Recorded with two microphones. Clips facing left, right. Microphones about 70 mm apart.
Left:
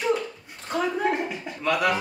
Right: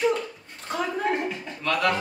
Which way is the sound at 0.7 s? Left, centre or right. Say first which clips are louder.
Left 2 dB; centre.